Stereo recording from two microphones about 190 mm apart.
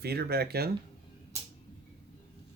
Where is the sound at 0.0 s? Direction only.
55° right (ahead or behind).